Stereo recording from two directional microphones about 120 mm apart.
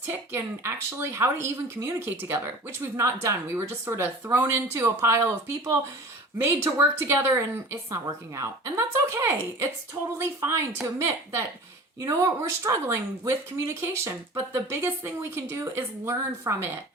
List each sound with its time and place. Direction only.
0.0 s speech: 20° right (ahead or behind)